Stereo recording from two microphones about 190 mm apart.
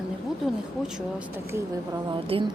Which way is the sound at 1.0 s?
5° right (ahead or behind).